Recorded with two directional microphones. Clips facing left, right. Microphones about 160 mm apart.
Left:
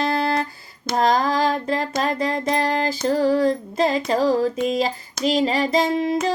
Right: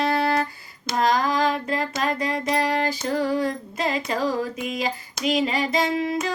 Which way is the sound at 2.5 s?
35° left (ahead or behind).